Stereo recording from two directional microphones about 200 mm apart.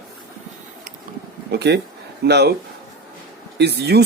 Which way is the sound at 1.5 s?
55° right (ahead or behind).